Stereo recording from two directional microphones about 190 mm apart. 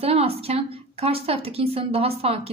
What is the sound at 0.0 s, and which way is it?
A woman's voice, 30° right (ahead or behind).